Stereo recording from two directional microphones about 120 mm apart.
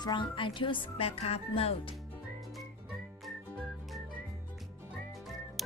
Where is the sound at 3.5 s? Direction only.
5° right (ahead or behind).